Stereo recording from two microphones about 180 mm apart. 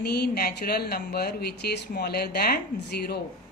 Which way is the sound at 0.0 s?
65° left (ahead or behind).